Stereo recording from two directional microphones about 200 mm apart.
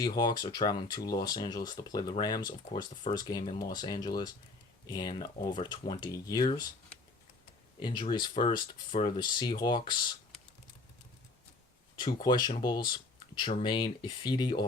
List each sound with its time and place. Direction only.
0.0 s speech: 20° left (ahead or behind)
7.8 s speech: 25° left (ahead or behind)
11.9 s speech: 20° left (ahead or behind)